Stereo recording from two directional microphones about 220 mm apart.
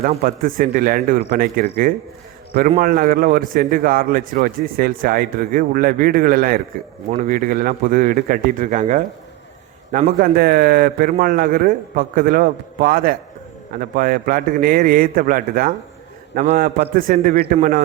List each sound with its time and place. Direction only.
0.0 s a man's voice: 40° right (ahead or behind)